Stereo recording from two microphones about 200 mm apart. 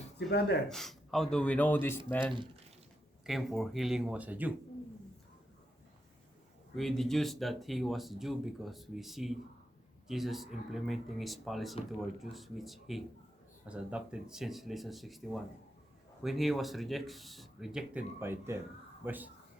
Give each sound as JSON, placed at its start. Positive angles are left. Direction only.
{"t": 0.3, "sound": "speech", "side_deg": 55}
{"t": 0.7, "sound": "speech", "side_deg": 0}
{"t": 2.2, "sound": "speech", "side_deg": -25}
{"t": 3.2, "sound": "speech", "side_deg": 0}
{"t": 6.7, "sound": "speech", "side_deg": 0}